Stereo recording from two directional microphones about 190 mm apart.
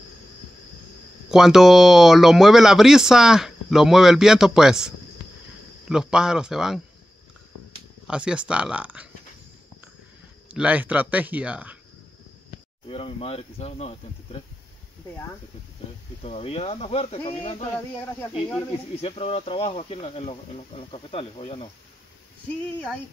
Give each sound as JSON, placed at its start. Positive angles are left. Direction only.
{"t": 1.3, "sound": "speech", "side_deg": -5}
{"t": 8.1, "sound": "speech", "side_deg": -5}
{"t": 10.5, "sound": "speech", "side_deg": -10}
{"t": 12.8, "sound": "speech", "side_deg": 30}
{"t": 16.2, "sound": "speech", "side_deg": 30}
{"t": 18.9, "sound": "speech", "side_deg": 30}